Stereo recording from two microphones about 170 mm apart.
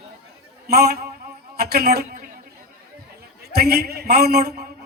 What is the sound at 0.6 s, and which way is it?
A man's voice, 70° right (ahead or behind).